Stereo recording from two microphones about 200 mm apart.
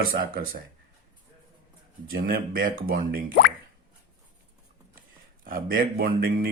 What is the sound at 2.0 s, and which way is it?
Speech, 45° right (ahead or behind).